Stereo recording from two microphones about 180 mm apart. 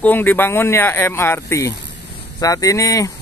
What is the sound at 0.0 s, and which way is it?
Speech, 10° left (ahead or behind).